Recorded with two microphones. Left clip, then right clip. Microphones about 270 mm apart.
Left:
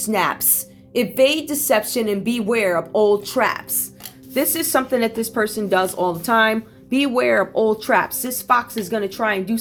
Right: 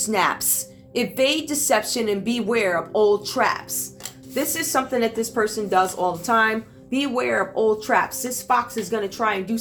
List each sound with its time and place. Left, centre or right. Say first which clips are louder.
0.0 s a woman's voice: left 1 dB; left